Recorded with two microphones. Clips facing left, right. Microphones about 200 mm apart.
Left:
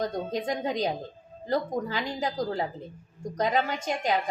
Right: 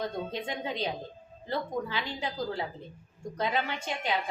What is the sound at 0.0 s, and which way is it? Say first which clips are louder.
A woman's voice: left 4 dB; 40° left (ahead or behind).